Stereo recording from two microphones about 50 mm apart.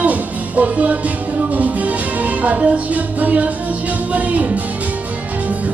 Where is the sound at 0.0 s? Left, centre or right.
Right.